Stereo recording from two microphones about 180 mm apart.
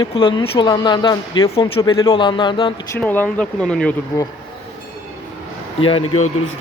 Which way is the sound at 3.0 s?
10° left (ahead or behind).